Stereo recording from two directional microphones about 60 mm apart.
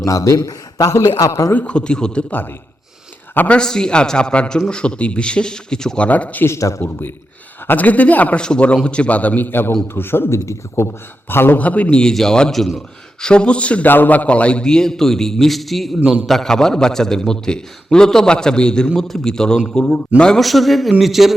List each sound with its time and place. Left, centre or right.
0.0 s a man's voice: left
1.5 s a man's voice: centre
3.3 s a man's voice: left
3.6 s a man's voice: centre
6.0 s a man's voice: left
6.6 s a man's voice: left
7.7 s a man's voice: left
11.3 s a man's voice: left
11.6 s a man's voice: left; by 12.7 s centre
13.2 s a man's voice: centre
13.8 s a man's voice: left; by 20.4 s centre
20.4 s a man's voice: centre